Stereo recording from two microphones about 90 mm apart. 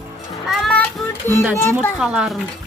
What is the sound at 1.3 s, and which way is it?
Speech, 25° left (ahead or behind).